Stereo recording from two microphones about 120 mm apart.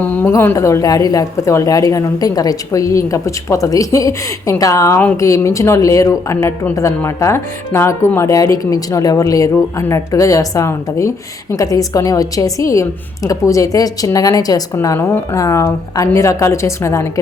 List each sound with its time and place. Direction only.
0.0 s speech: 15° left (ahead or behind)